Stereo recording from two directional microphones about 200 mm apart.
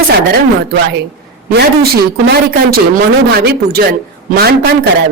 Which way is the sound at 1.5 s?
55° right (ahead or behind).